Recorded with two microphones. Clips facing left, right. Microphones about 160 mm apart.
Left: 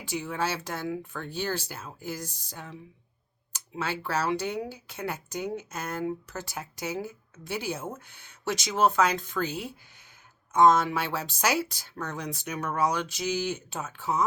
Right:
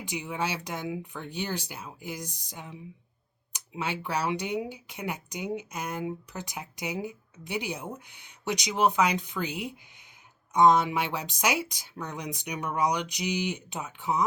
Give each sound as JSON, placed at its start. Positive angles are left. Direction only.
{"t": 0.0, "sound": "speech", "side_deg": -15}